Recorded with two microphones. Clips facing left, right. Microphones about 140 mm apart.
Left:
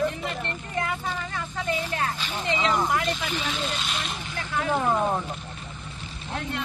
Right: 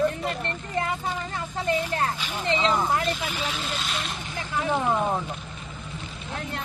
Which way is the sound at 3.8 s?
Centre (ahead or behind).